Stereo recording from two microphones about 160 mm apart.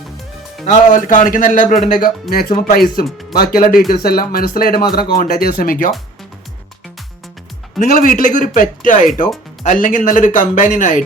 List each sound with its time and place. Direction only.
0.6 s a man's voice: 55° left (ahead or behind)
2.3 s speech: 70° left (ahead or behind)
7.8 s speech: 55° left (ahead or behind)